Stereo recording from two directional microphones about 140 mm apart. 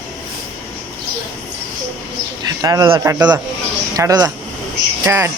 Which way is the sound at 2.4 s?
25° right (ahead or behind).